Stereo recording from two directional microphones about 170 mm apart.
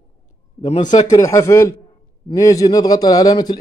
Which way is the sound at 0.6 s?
40° left (ahead or behind).